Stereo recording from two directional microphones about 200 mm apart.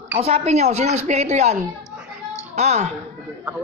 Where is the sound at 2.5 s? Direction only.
35° right (ahead or behind).